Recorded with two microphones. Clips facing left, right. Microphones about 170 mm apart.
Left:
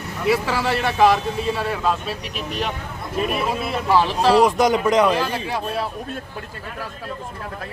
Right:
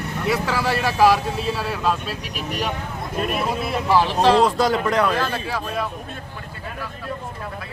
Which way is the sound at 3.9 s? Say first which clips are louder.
Even; 5° left (ahead or behind).